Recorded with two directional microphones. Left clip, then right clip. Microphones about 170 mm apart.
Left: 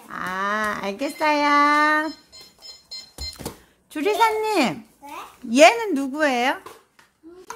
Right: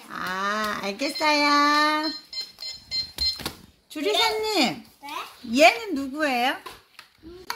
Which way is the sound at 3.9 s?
10° left (ahead or behind).